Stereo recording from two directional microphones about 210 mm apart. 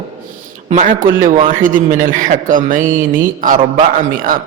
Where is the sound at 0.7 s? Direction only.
35° right (ahead or behind).